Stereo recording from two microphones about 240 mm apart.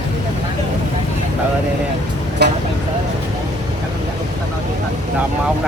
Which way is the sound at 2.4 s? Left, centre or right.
Right.